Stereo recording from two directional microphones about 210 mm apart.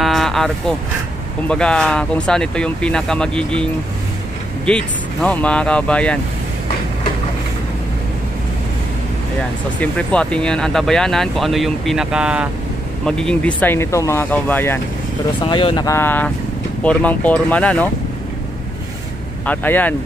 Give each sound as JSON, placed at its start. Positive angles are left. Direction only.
{"t": 0.0, "sound": "vehicle", "side_deg": 0}
{"t": 1.5, "sound": "speech", "side_deg": 5}
{"t": 4.6, "sound": "speech", "side_deg": 5}
{"t": 9.8, "sound": "speech", "side_deg": 5}
{"t": 15.4, "sound": "speech", "side_deg": 25}
{"t": 19.4, "sound": "speech", "side_deg": 10}